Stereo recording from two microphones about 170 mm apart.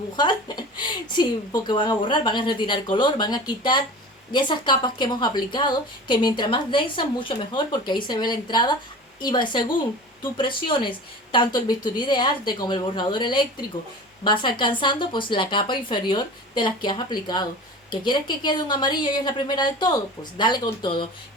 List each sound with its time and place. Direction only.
0.2 s a woman's voice: 25° left (ahead or behind)